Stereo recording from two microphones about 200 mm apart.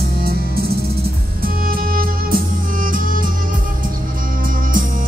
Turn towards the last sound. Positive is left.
turn(degrees=-45)  # may be behind; listen again after turning